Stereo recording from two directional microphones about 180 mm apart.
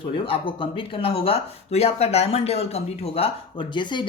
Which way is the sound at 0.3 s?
30° left (ahead or behind).